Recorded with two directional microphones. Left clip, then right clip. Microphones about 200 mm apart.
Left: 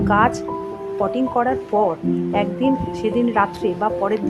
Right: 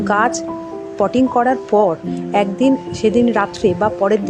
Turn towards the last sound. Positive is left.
turn(degrees=-20)  # may be behind; listen again after turning